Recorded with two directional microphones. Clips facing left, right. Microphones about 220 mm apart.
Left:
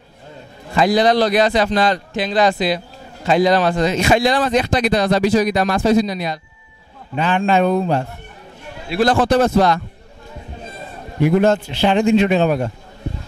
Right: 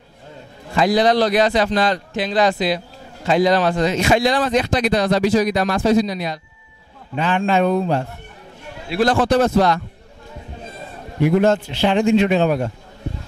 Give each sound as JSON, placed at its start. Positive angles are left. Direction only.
{"t": 0.7, "sound": "speech", "side_deg": 10}
{"t": 7.7, "sound": "speech", "side_deg": 25}
{"t": 9.2, "sound": "speech", "side_deg": 10}
{"t": 11.2, "sound": "speech", "side_deg": 15}